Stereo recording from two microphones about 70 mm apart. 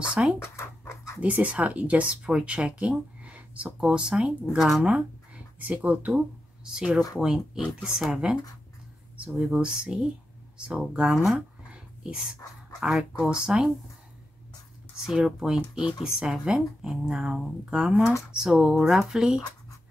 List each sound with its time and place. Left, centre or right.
0.1 s speech: centre
0.4 s dog: left
1.2 s speech: centre
9.1 s speech: centre
11.2 s dog: centre
12.8 s speech: centre
15.0 s speech: centre